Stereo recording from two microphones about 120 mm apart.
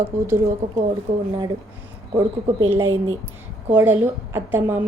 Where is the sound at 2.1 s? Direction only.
20° right (ahead or behind).